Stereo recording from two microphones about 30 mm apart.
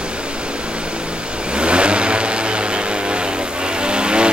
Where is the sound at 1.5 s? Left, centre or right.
Right.